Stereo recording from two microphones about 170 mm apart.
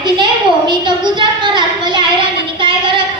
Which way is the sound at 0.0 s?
25° right (ahead or behind).